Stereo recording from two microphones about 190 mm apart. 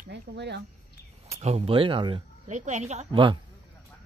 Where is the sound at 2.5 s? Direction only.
40° right (ahead or behind).